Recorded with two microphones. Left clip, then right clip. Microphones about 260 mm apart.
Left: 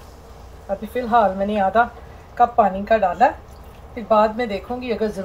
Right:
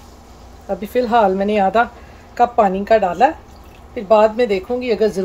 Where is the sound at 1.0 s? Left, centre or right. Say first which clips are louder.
Right 3 dB; right.